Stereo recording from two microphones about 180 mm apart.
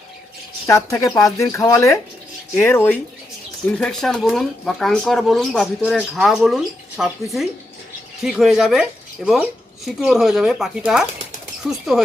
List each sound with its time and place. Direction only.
0.7 s speech: 15° left (ahead or behind); by 11.8 s centre (ahead or behind)